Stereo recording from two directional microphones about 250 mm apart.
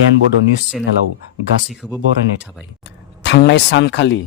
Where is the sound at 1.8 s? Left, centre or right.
Centre.